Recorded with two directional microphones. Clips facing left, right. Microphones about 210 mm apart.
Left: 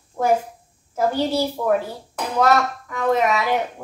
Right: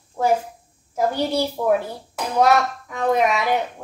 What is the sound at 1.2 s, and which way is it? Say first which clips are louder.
Speech: left 1 dB; 15° right (ahead or behind).